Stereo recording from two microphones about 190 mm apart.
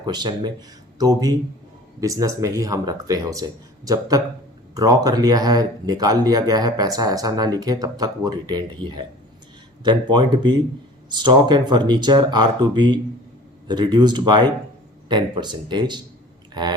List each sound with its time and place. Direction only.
0.0 s speech: 20° right (ahead or behind)